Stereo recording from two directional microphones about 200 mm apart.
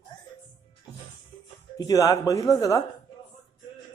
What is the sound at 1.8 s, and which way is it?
Speech, 15° left (ahead or behind).